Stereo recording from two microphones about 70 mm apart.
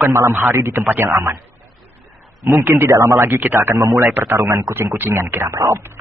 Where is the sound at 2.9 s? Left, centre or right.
Right.